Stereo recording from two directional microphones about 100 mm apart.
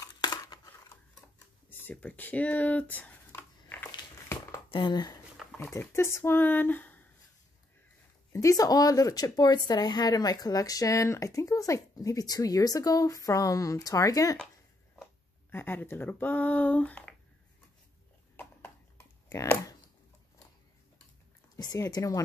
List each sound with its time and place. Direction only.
0.0 s a sound: 40° left (ahead or behind)
1.7 s a sound: 20° left (ahead or behind)
4.6 s speech: 50° left (ahead or behind)
5.6 s speech: 25° left (ahead or behind)
8.3 s speech: 35° left (ahead or behind)
15.5 s speech: 20° left (ahead or behind)
18.3 s computer keyboard: 20° left (ahead or behind)
21.7 s speech: 35° left (ahead or behind)